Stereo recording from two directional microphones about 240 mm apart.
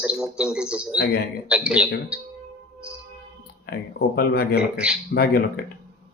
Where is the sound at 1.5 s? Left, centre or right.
Centre.